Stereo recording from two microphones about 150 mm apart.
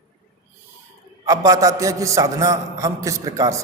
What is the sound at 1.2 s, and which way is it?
A man's voice, 20° right (ahead or behind).